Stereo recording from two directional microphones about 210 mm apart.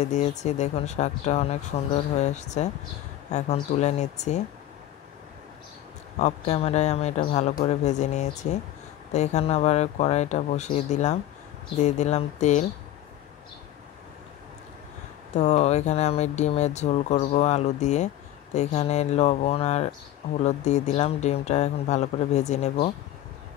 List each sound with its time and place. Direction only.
0.0 s speech: 35° left (ahead or behind)
6.1 s speech: 30° left (ahead or behind)
15.3 s speech: 35° left (ahead or behind)